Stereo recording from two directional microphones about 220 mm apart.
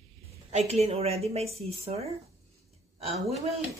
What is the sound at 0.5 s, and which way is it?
A woman's voice, 30° right (ahead or behind).